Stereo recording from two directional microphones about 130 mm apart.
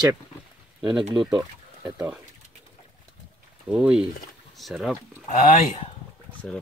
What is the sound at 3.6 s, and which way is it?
Speech, 10° right (ahead or behind).